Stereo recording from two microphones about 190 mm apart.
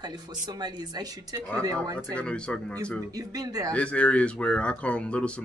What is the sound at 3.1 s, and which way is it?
Speech, 20° right (ahead or behind).